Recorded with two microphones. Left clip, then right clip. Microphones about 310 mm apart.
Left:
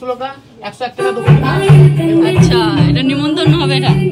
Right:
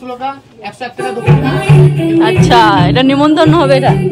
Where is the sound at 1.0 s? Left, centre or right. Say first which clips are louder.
Even; centre.